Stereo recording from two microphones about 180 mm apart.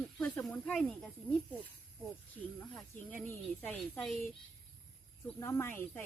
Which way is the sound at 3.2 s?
10° left (ahead or behind).